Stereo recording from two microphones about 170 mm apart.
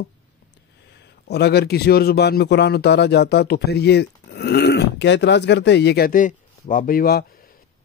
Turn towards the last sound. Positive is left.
turn(degrees=60)  # may be behind; listen again after turning